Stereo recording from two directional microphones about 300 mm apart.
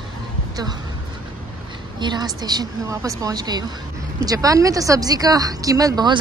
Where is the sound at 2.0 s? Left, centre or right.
Centre.